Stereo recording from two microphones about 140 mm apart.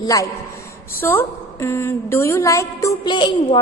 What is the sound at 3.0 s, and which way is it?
Speech, 35° left (ahead or behind).